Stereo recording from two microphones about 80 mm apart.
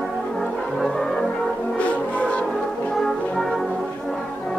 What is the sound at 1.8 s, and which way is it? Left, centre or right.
Brass instrument, centre.